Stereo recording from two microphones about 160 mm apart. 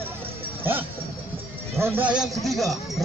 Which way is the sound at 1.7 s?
15° right (ahead or behind).